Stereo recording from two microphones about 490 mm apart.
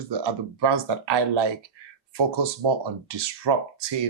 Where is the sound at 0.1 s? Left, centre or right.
Right.